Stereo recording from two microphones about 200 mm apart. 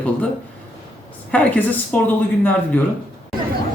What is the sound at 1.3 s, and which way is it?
Speech, 10° left (ahead or behind).